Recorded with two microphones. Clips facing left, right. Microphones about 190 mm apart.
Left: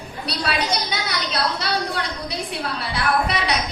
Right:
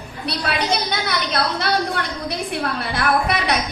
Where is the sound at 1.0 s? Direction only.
55° right (ahead or behind).